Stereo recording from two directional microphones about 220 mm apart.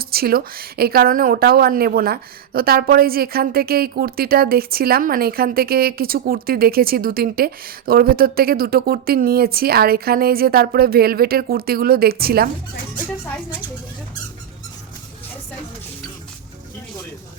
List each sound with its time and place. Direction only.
0.0 s speech: 45° right (ahead or behind)